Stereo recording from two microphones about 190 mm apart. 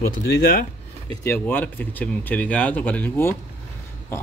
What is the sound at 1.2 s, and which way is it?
A man's voice, 10° left (ahead or behind).